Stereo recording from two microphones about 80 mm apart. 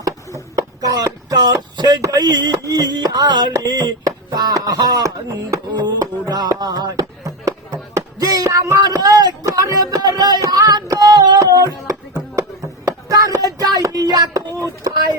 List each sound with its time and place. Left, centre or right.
0.8 s speech: right
2.0 s music: right
3.5 s a sound: right
6.2 s music: right
8.2 s music: right
8.4 s a sound: right
9.5 s speech: right
9.8 s music: right
12.1 s a sound: right